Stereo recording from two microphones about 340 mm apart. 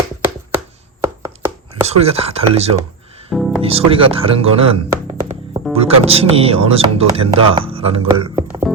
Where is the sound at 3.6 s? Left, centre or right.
Centre.